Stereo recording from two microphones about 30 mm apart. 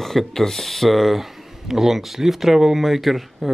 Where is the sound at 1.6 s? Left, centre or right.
Centre.